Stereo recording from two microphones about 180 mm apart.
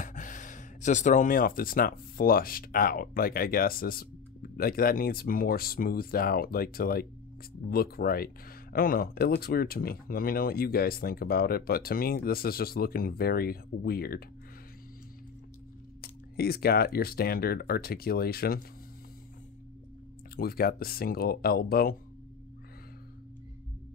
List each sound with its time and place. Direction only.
0.0 s speech: 45° left (ahead or behind)
16.0 s speech: 60° left (ahead or behind)
20.3 s speech: 55° left (ahead or behind)